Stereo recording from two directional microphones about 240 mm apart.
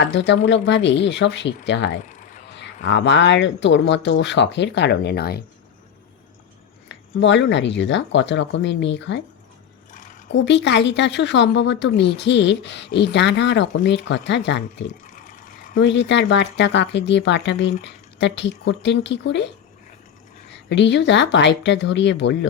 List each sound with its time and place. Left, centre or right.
0.1 s speech: left
2.0 s a sound: left
2.8 s speech: left
6.8 s speech: left
9.9 s a sound: left
10.3 s speech: left
15.0 s sewing machine: left
15.8 s speech: left
20.7 s speech: left